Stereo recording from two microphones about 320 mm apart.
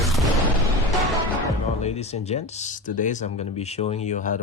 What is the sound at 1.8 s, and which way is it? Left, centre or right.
Speech, centre.